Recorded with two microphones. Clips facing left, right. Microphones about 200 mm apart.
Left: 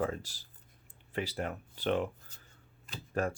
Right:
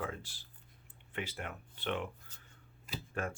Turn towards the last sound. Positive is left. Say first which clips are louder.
# left 6 dB
turn(degrees=40)  # may be behind; listen again after turning